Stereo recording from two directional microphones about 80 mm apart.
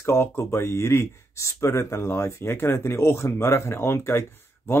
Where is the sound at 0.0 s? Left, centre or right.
Left.